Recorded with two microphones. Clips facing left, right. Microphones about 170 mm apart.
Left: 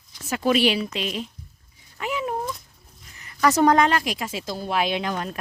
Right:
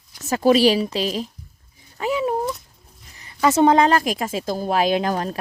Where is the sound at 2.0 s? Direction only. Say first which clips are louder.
Right 6 dB; 30° right (ahead or behind).